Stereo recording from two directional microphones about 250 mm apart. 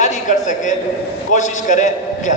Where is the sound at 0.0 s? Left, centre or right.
Left.